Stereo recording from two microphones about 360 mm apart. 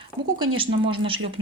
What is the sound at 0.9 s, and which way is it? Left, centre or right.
Speech, centre.